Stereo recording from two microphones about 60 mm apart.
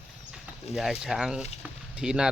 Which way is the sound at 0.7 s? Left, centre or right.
Centre.